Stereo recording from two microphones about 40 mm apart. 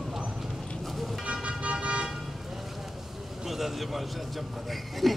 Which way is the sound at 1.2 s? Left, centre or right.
Right.